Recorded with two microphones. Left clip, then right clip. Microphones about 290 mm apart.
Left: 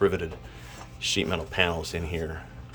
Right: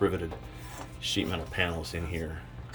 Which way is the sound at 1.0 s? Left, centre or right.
Centre.